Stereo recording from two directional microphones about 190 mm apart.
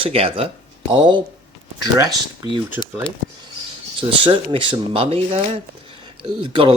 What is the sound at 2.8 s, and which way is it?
Speech, 15° right (ahead or behind).